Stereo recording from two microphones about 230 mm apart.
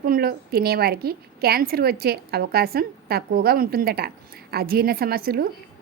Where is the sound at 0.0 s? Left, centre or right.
Right.